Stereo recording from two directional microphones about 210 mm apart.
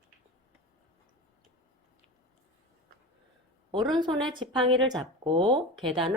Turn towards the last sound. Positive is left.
turn(degrees=-25)  # may be behind; listen again after turning